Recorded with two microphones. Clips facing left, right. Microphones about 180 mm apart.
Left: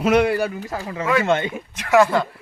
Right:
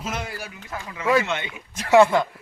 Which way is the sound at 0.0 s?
65° left (ahead or behind).